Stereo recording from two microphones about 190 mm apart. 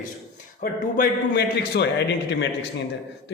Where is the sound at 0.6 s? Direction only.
50° left (ahead or behind).